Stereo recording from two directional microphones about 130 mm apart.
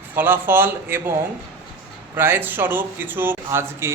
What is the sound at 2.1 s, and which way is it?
A man's voice, 15° right (ahead or behind).